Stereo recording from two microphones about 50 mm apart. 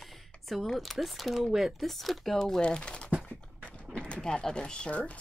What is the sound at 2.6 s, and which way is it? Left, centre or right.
Speech, centre.